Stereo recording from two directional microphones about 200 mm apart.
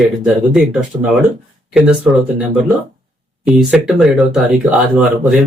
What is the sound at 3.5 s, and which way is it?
Speech, centre (ahead or behind).